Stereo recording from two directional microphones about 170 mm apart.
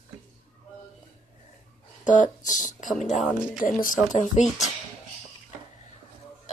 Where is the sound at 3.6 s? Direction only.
50° left (ahead or behind).